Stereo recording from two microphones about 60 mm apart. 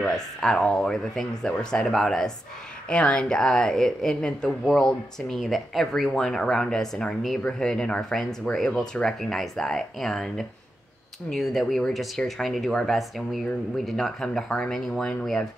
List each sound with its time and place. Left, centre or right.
0.0 s speech: centre
5.4 s speech: centre